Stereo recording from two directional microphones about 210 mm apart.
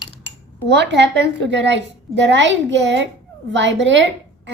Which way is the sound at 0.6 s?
55° right (ahead or behind).